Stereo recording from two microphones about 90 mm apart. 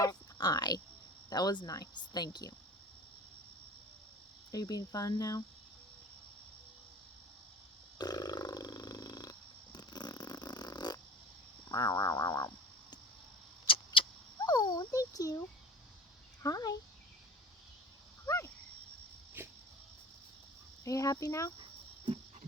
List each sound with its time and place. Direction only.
0.0 s speech: 45° left (ahead or behind)
4.5 s speech: 45° left (ahead or behind)
7.9 s burping: 50° left (ahead or behind)
9.7 s snoring: 50° left (ahead or behind)
11.7 s speech: 45° left (ahead or behind)
13.7 s vehicle: 75° left (ahead or behind)
14.4 s a sound: 50° left (ahead or behind)
16.4 s speech: 45° left (ahead or behind)
19.4 s a sound: 25° right (ahead or behind)
20.8 s speech: 40° left (ahead or behind)
21.6 s cricket: 80° right